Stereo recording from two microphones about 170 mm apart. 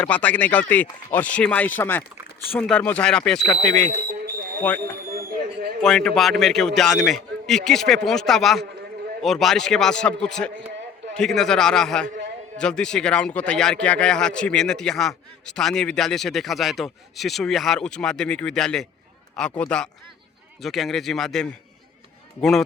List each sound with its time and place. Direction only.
0.0 s speech: 10° left (ahead or behind)
5.1 s a sound: 60° right (ahead or behind)
5.8 s speech: 5° left (ahead or behind)